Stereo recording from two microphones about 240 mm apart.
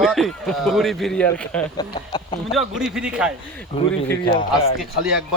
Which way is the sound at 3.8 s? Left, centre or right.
Left.